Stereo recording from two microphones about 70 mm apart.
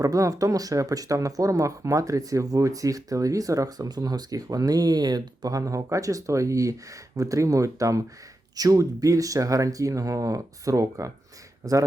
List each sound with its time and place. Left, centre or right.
0.0 s speech: right